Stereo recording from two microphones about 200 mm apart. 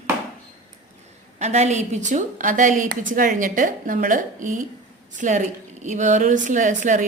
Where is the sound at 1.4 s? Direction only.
35° right (ahead or behind).